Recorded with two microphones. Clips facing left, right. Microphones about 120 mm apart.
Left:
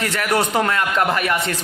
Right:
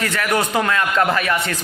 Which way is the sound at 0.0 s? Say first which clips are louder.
Even; 25° left (ahead or behind).